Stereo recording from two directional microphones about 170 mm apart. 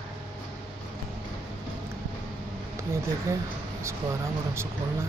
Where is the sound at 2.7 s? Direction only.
15° right (ahead or behind).